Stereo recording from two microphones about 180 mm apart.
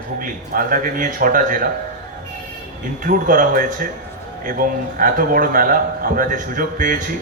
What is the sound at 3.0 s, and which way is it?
A man's voice, 50° right (ahead or behind).